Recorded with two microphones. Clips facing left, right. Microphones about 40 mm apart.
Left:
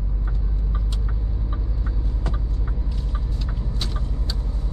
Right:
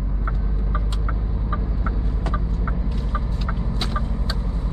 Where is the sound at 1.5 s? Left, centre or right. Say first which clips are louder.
Right 6 dB; right.